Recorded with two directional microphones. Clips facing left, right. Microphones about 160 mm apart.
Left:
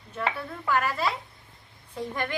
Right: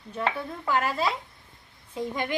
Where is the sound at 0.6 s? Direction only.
20° right (ahead or behind).